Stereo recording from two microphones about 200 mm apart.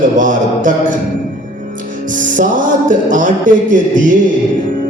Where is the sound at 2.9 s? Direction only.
40° right (ahead or behind).